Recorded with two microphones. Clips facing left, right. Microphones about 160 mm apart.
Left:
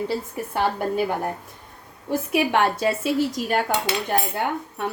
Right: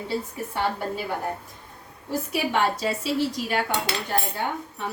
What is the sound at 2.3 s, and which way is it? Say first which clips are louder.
A woman's voice: left 4 dB; 60° left (ahead or behind).